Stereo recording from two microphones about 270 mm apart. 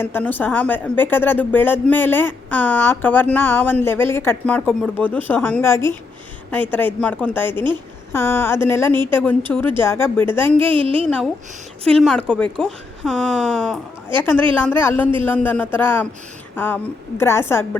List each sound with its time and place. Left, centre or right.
0.0 s speech: centre
10.6 s a woman's voice: centre
11.9 s speech: centre